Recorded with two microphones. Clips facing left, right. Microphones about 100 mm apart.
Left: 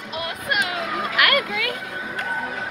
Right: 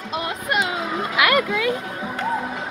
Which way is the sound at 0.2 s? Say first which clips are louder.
Right 1 dB; 25° right (ahead or behind).